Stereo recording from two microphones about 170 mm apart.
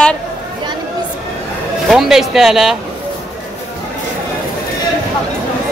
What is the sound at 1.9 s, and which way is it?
Speech, centre (ahead or behind).